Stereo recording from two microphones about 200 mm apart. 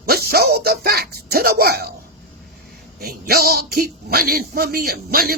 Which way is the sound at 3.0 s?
50° right (ahead or behind).